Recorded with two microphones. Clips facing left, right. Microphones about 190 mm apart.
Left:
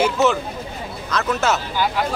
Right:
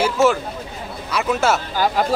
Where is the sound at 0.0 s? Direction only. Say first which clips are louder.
Right 1 dB; 10° right (ahead or behind).